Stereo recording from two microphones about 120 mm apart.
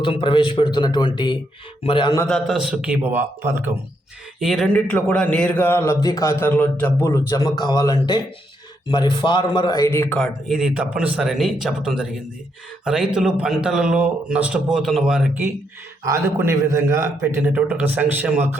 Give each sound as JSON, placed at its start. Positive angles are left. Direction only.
{"t": 0.0, "sound": "a man's voice", "side_deg": 45}
{"t": 2.2, "sound": "a man's voice", "side_deg": 5}
{"t": 2.6, "sound": "speech", "side_deg": -5}
{"t": 4.4, "sound": "speech", "side_deg": 0}
{"t": 4.7, "sound": "a man's voice", "side_deg": 10}
{"t": 6.5, "sound": "a man's voice", "side_deg": 15}
{"t": 10.5, "sound": "speech", "side_deg": -5}
{"t": 16.0, "sound": "a man's voice", "side_deg": -25}